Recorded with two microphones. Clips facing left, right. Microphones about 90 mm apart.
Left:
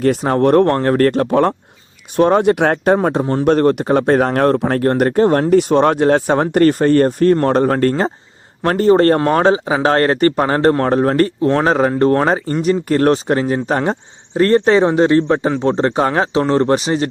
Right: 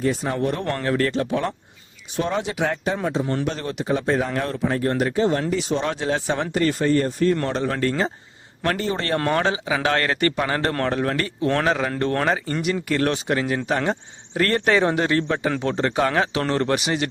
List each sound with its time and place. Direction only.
0.0 s a man's voice: 65° left (ahead or behind); by 17.1 s 35° left (ahead or behind)